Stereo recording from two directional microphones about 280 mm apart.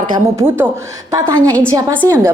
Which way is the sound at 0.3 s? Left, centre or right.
Centre.